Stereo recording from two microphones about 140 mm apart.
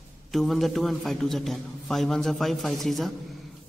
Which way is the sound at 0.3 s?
Centre (ahead or behind).